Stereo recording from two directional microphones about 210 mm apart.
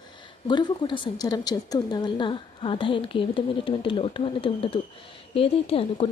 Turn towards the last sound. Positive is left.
turn(degrees=25)  # may be behind; listen again after turning